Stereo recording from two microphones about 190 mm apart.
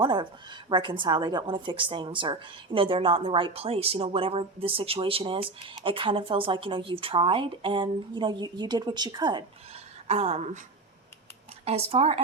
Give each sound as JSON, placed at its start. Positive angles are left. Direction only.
{"t": 0.0, "sound": "a woman's voice", "side_deg": -25}
{"t": 10.1, "sound": "speech", "side_deg": -35}
{"t": 11.6, "sound": "speech", "side_deg": -30}